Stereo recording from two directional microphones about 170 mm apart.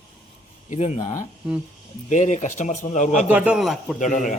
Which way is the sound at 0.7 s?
40° left (ahead or behind).